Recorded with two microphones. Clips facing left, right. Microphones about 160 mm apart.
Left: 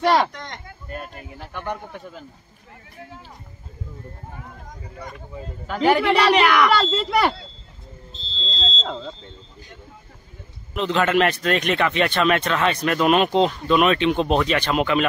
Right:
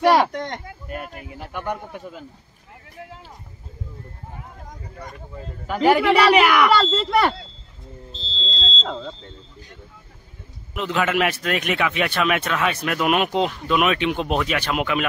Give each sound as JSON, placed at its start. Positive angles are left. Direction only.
{"t": 0.0, "sound": "a man's voice", "side_deg": -10}
{"t": 0.3, "sound": "a sound", "side_deg": -55}
{"t": 1.5, "sound": "a man's voice", "side_deg": -10}
{"t": 5.7, "sound": "a woman's voice", "side_deg": -5}
{"t": 6.8, "sound": "a woman's voice", "side_deg": 5}
{"t": 8.1, "sound": "smoke detector", "side_deg": -30}
{"t": 8.8, "sound": "a woman's voice", "side_deg": 5}
{"t": 10.7, "sound": "a man's voice", "side_deg": -5}